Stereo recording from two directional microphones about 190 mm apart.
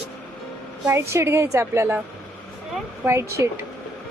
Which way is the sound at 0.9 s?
15° right (ahead or behind).